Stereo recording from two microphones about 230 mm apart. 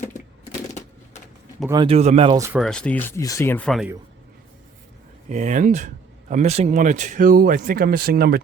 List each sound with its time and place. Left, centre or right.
0.7 s typewriter: left
1.6 s speech: centre
2.6 s speech: centre
5.3 s speech: right